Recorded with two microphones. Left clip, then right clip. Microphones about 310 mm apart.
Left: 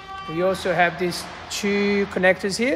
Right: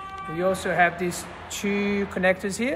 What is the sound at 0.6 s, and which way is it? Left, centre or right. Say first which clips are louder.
Speech: left 2 dB; left.